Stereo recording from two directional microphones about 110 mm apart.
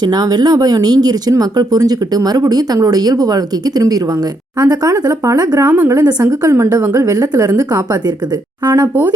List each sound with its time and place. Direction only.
0.0 s speech: 35° right (ahead or behind)
5.6 s a woman's voice: 15° right (ahead or behind)
6.0 s a woman's voice: 35° right (ahead or behind)